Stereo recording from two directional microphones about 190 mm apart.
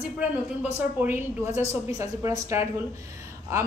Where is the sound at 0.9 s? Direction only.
10° right (ahead or behind).